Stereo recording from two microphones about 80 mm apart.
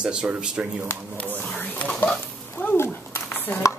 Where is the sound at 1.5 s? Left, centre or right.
Centre.